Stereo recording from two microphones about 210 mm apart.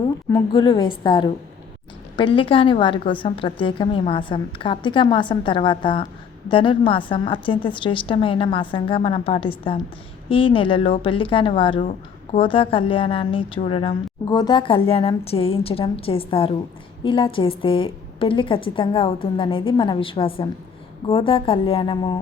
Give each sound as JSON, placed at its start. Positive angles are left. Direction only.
{"t": 0.0, "sound": "a woman's voice", "side_deg": 20}